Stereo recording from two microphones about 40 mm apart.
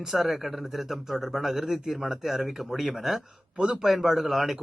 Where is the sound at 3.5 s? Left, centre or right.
Right.